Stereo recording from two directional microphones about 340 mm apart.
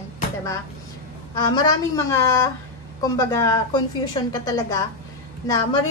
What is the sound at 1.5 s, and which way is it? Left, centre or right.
A woman's voice, centre.